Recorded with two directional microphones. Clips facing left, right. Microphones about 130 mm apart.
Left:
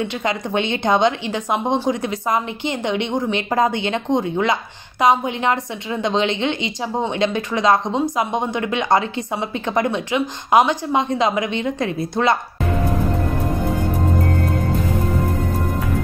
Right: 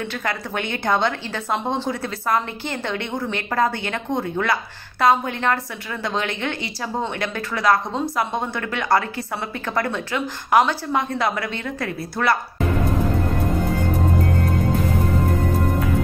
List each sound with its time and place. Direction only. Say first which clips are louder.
0.0 s speech: left 4 dB; 20° left (ahead or behind)